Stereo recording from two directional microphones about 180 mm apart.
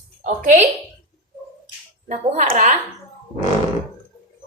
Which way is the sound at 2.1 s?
45° right (ahead or behind).